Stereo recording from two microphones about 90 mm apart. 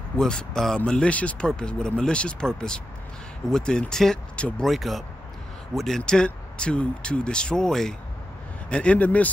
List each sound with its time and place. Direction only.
0.2 s speech: 5° left (ahead or behind)